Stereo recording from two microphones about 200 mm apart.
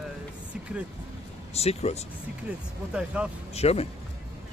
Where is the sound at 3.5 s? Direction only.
30° left (ahead or behind).